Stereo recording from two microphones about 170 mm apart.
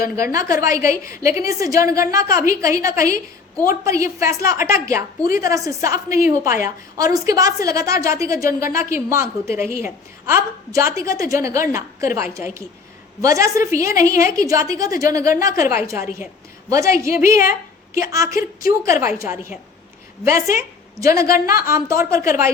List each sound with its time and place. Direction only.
0.0 s a woman's voice: 20° right (ahead or behind)